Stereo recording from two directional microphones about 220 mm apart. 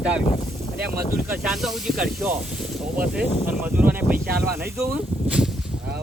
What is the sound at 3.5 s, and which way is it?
Speech, 5° right (ahead or behind).